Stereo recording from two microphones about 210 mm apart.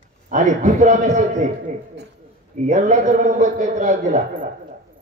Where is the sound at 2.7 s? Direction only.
35° right (ahead or behind).